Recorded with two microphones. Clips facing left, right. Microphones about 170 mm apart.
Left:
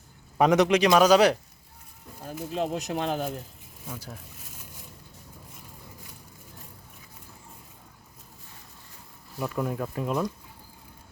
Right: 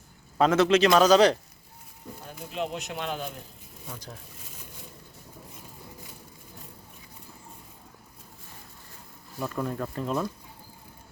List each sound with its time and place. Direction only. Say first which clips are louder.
0.3 s a man's voice: even; 15° left (ahead or behind)
2.6 s speech: left 3 dB; 40° left (ahead or behind)
3.8 s a man's voice: left 2 dB; 5° left (ahead or behind)
9.4 s a man's voice: left 1 dB; 10° left (ahead or behind)